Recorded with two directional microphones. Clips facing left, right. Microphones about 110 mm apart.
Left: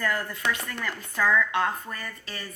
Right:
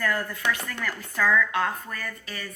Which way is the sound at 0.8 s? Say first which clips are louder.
Even; 15° left (ahead or behind).